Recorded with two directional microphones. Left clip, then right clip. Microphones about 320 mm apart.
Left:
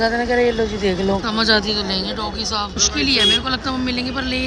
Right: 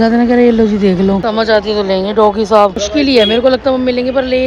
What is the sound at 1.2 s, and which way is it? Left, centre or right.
Speech, centre.